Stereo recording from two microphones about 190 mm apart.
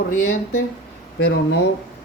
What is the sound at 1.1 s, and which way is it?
Speech, 55° left (ahead or behind).